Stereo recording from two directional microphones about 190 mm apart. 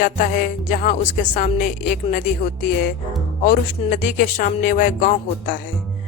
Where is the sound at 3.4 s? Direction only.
45° left (ahead or behind).